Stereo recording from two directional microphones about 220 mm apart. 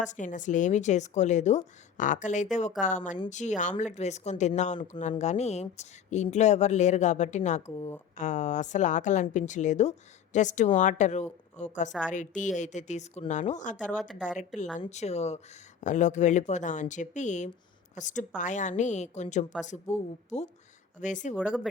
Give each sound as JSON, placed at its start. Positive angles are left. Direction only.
{"t": 0.0, "sound": "speech", "side_deg": 35}
{"t": 11.9, "sound": "speech", "side_deg": 5}
{"t": 12.1, "sound": "speech", "side_deg": 35}
{"t": 13.9, "sound": "speech", "side_deg": 0}
{"t": 14.6, "sound": "speech", "side_deg": 35}